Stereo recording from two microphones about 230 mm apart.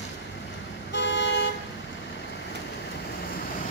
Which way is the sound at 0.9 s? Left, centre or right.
Left.